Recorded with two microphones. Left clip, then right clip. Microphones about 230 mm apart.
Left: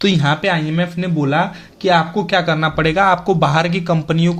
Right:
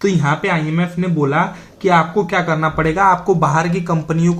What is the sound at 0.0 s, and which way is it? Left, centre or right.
A man's voice, left.